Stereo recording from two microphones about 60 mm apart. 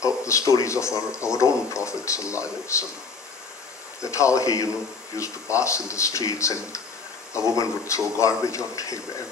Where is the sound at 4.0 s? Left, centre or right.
Left.